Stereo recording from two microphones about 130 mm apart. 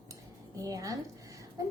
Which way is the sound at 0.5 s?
25° right (ahead or behind).